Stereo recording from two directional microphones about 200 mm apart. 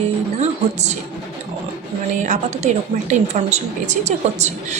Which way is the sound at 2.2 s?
35° right (ahead or behind).